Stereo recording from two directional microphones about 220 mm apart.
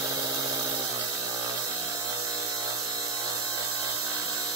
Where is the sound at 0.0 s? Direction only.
15° right (ahead or behind).